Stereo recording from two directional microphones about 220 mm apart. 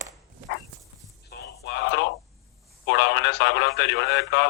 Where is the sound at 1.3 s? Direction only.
45° left (ahead or behind).